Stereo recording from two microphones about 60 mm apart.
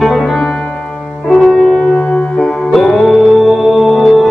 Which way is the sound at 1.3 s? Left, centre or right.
Centre.